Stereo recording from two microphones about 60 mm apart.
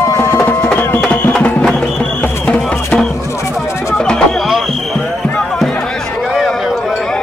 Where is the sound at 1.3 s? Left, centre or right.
Centre.